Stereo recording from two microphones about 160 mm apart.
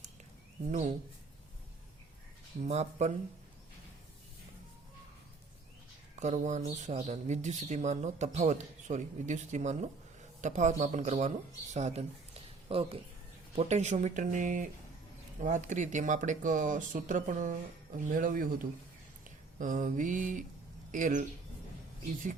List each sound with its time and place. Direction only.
0.7 s speech: 45° right (ahead or behind)
2.6 s speech: 45° right (ahead or behind)
6.1 s speech: 45° right (ahead or behind)